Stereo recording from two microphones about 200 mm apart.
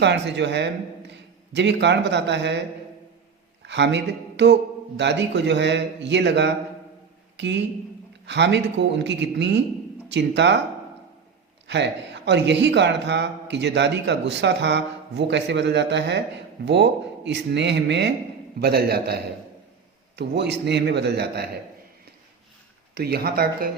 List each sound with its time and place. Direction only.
0.0 s a man's voice: 60° right (ahead or behind)
3.6 s a man's voice: 60° right (ahead or behind)
11.7 s a man's voice: 60° right (ahead or behind)
23.0 s speech: 50° right (ahead or behind)